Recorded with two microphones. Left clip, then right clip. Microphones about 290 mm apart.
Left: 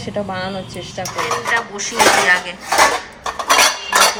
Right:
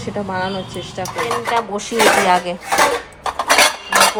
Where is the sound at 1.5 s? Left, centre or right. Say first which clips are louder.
Left 1 dB; centre.